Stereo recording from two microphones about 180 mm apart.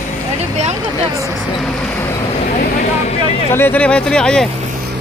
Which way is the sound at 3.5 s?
10° left (ahead or behind).